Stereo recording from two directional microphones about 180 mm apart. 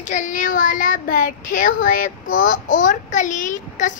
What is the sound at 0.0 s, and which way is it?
Speech, 45° left (ahead or behind).